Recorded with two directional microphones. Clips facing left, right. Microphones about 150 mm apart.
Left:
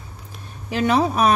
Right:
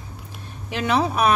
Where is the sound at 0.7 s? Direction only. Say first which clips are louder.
Left 3 dB; 40° left (ahead or behind).